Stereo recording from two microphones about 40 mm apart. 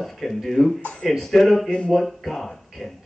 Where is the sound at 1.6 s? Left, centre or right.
Left.